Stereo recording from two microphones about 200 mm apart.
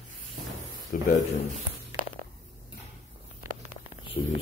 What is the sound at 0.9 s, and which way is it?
Speech, 45° left (ahead or behind).